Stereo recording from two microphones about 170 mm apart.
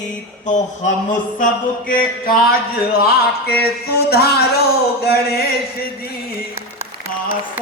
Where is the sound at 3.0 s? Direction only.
65° left (ahead or behind).